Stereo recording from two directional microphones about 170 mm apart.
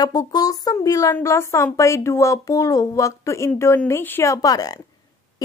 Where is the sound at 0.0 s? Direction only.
25° left (ahead or behind).